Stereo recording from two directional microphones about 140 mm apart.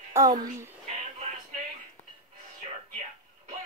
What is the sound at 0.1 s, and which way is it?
Speech, 20° right (ahead or behind).